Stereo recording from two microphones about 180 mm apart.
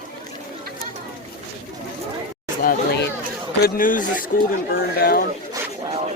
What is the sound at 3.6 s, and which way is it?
Speech, 50° left (ahead or behind).